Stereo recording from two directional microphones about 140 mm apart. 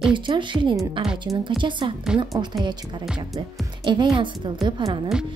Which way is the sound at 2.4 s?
25° right (ahead or behind).